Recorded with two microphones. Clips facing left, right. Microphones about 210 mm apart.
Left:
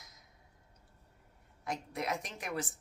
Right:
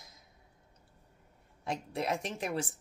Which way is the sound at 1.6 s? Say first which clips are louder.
Right 3 dB; 30° right (ahead or behind).